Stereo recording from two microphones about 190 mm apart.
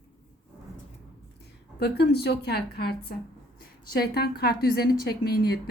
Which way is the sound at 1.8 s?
60° left (ahead or behind).